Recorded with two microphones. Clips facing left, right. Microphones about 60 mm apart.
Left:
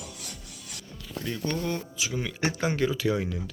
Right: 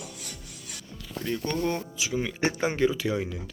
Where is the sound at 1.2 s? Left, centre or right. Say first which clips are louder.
Right 2 dB; centre.